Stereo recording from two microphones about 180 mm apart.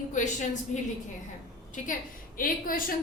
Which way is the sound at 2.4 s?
50° left (ahead or behind).